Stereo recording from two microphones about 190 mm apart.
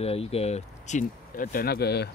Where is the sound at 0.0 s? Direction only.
30° left (ahead or behind).